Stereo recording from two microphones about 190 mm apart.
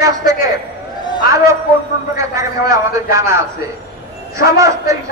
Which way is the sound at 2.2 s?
15° right (ahead or behind).